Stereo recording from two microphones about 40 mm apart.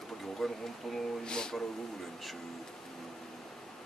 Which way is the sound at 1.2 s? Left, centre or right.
Centre.